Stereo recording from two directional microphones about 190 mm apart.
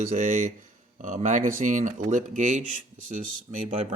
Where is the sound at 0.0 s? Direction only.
40° right (ahead or behind).